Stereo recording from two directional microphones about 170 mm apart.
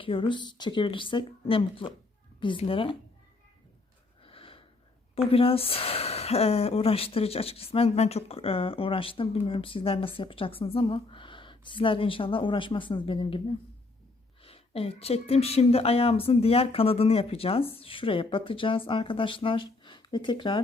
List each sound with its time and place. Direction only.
0.0 s speech: 30° left (ahead or behind)
4.2 s gasp: 35° left (ahead or behind)
5.1 s speech: 35° left (ahead or behind)
14.4 s speech: 35° left (ahead or behind)